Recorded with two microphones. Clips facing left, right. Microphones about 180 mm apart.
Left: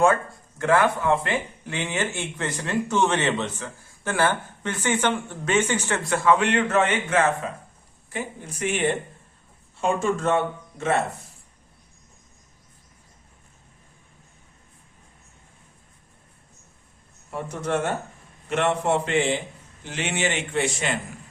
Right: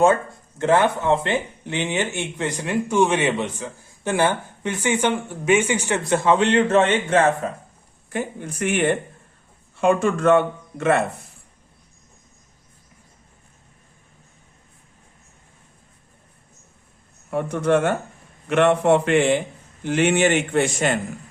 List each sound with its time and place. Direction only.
0.6 s speech: 25° right (ahead or behind)
7.4 s a man's voice: 45° right (ahead or behind)
17.3 s a man's voice: 60° right (ahead or behind)